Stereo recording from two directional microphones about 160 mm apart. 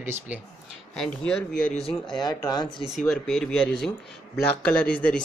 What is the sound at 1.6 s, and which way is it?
Speech, 55° left (ahead or behind).